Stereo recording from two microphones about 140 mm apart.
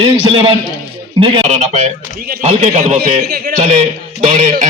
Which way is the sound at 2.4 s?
50° right (ahead or behind).